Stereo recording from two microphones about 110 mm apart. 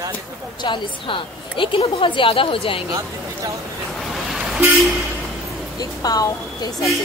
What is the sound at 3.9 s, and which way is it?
Waves, centre (ahead or behind).